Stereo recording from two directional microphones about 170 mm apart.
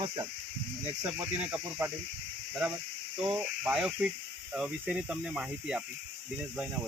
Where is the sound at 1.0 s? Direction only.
10° right (ahead or behind).